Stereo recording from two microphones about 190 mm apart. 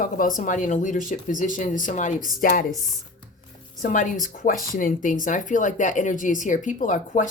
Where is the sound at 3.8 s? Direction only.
45° left (ahead or behind).